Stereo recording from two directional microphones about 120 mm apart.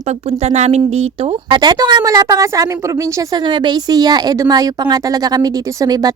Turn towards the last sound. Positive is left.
turn(degrees=-35)  # may be behind; listen again after turning